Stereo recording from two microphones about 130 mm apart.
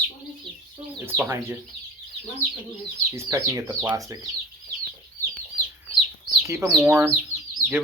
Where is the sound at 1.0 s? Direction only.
15° right (ahead or behind).